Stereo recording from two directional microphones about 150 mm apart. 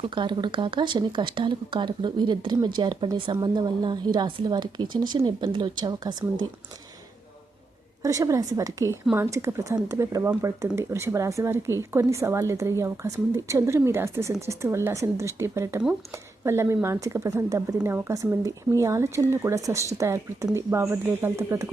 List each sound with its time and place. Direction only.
0.1 s speech: 30° right (ahead or behind)
8.0 s a woman's voice: 20° right (ahead or behind)